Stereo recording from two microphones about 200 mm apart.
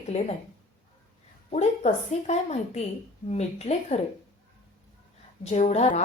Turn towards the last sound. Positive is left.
turn(degrees=35)  # may be behind; listen again after turning